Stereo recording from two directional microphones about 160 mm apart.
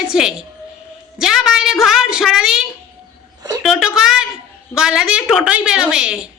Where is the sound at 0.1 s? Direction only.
5° right (ahead or behind).